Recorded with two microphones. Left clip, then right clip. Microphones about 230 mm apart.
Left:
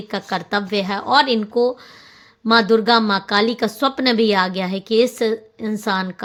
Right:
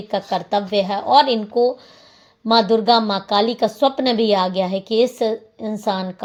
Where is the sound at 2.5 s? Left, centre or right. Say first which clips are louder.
Even; left.